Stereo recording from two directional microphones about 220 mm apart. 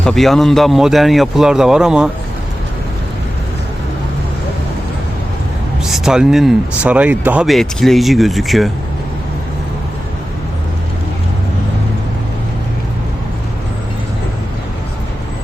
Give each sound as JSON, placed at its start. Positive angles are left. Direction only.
{"t": 0.0, "sound": "speech", "side_deg": 0}
{"t": 5.8, "sound": "speech", "side_deg": 0}